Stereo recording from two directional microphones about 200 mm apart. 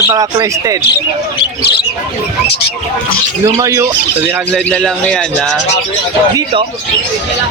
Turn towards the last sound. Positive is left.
turn(degrees=-25)  # may be behind; listen again after turning